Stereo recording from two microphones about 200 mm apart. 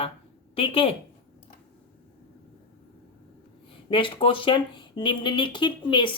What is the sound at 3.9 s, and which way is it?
Speech, 25° left (ahead or behind).